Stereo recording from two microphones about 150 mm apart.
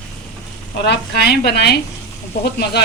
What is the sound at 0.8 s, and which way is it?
A woman's voice, 90° left.